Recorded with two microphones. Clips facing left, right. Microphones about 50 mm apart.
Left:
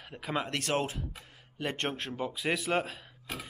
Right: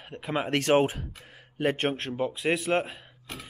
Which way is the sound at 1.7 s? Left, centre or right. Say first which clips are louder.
Right 6 dB; centre.